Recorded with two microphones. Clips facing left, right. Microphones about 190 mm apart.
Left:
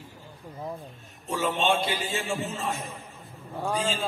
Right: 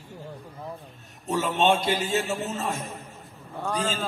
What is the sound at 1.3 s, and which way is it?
A man's voice, 40° right (ahead or behind).